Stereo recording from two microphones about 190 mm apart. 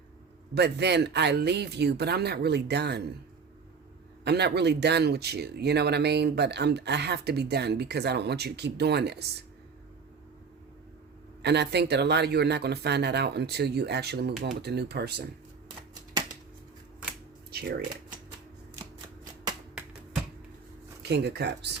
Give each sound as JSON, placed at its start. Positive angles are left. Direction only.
{"t": 0.5, "sound": "speech", "side_deg": -60}
{"t": 4.2, "sound": "speech", "side_deg": -60}
{"t": 11.4, "sound": "speech", "side_deg": -60}
{"t": 17.5, "sound": "speech", "side_deg": -55}
{"t": 21.0, "sound": "speech", "side_deg": -60}